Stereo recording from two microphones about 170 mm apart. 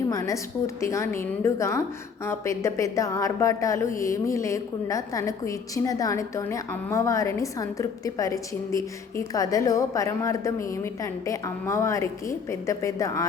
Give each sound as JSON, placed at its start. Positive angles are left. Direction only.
{"t": 0.1, "sound": "a woman's voice", "side_deg": 20}